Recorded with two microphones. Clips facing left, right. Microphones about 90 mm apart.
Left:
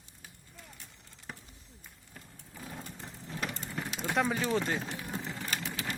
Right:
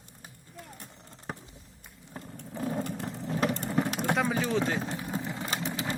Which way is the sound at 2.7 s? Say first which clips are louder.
Right 11 dB; 80° right.